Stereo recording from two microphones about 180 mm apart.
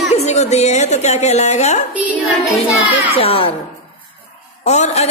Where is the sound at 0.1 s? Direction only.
40° left (ahead or behind).